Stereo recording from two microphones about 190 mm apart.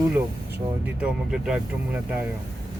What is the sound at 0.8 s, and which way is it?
Speech, 5° right (ahead or behind).